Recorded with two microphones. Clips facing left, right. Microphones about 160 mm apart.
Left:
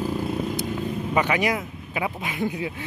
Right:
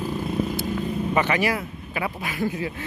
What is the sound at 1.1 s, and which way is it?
Speech, 10° left (ahead or behind).